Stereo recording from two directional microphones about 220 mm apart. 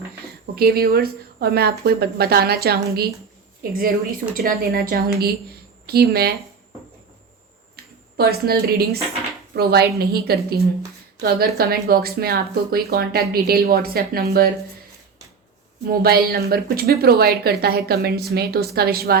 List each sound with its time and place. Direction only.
0.5 s a woman's voice: 45° right (ahead or behind)
7.8 s a sound: 45° right (ahead or behind)
8.1 s speech: 45° right (ahead or behind)
15.9 s speech: 45° right (ahead or behind)